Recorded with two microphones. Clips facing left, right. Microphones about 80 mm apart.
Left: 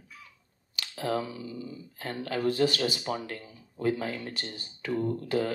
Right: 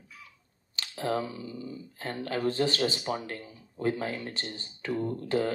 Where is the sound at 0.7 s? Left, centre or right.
Right.